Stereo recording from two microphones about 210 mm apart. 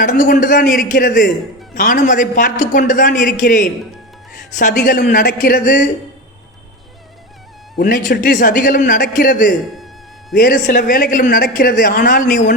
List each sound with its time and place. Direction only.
0.0 s speech: 40° left (ahead or behind)
4.7 s speech: 45° left (ahead or behind)
7.8 s speech: 40° left (ahead or behind)
9.7 s music: centre (ahead or behind)
10.3 s speech: 45° left (ahead or behind)